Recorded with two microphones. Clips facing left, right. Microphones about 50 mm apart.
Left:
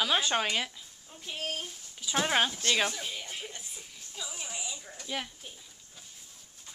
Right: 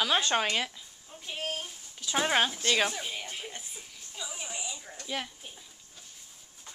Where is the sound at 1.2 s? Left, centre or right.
Centre.